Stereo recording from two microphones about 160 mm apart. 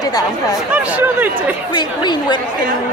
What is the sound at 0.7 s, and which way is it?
Speech, 10° right (ahead or behind).